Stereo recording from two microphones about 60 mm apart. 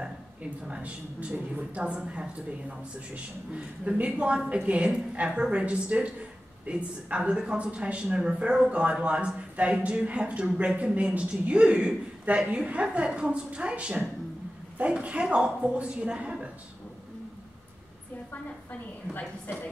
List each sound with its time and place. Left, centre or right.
0.0 s a woman's voice: centre
3.5 s a woman's voice: centre